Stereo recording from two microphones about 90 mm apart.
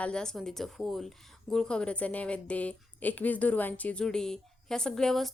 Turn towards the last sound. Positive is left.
turn(degrees=5)  # may be behind; listen again after turning